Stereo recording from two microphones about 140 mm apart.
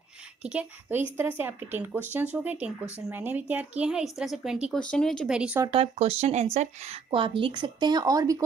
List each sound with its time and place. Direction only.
0.4 s speech: 10° right (ahead or behind)
4.7 s speech: 5° left (ahead or behind)
5.7 s speech: 45° right (ahead or behind)
7.1 s speech: 35° right (ahead or behind)